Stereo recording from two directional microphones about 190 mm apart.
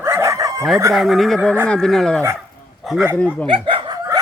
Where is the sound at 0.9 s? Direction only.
Centre (ahead or behind).